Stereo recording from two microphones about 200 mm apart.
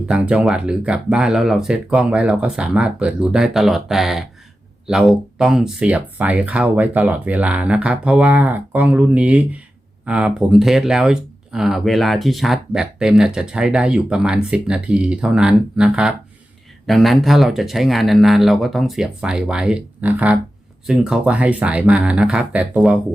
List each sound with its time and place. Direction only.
0.1 s speech: 5° right (ahead or behind)